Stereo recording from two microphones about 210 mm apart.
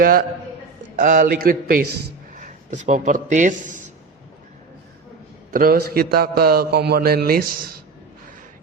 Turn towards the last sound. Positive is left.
turn(degrees=-45)  # may be behind; listen again after turning